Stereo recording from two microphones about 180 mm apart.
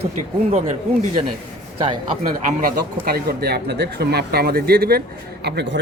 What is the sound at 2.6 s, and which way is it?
Speech, 50° right (ahead or behind).